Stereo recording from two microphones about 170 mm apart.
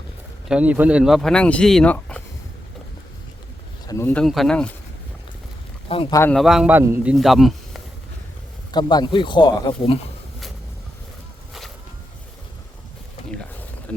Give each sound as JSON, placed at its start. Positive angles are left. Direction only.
{"t": 0.4, "sound": "speech", "side_deg": -5}
{"t": 3.8, "sound": "speech", "side_deg": 15}
{"t": 5.9, "sound": "speech", "side_deg": 30}
{"t": 6.3, "sound": "speech", "side_deg": 0}
{"t": 8.7, "sound": "speech", "side_deg": 25}